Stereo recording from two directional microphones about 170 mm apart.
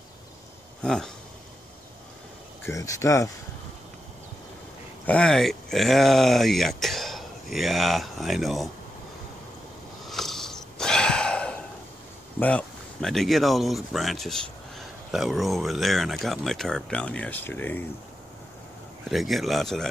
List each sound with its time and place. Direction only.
0.8 s speech: 5° left (ahead or behind)
2.6 s speech: 20° left (ahead or behind)
5.0 s speech: 5° left (ahead or behind)
10.0 s sniff: centre (ahead or behind)
12.4 s speech: 5° left (ahead or behind)
19.0 s speech: centre (ahead or behind)